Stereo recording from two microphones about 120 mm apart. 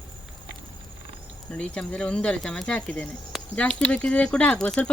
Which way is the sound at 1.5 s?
10° left (ahead or behind).